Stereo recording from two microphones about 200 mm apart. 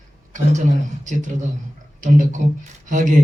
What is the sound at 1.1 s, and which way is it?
A man's voice, 40° right (ahead or behind).